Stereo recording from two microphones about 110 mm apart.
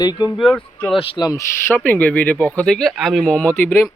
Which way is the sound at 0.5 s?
10° left (ahead or behind).